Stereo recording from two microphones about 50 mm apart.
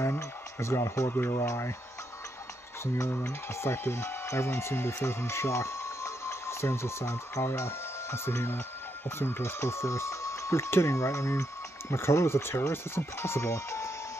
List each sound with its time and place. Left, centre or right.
0.0 s speech: left
1.1 s speech: left
2.8 s speech: left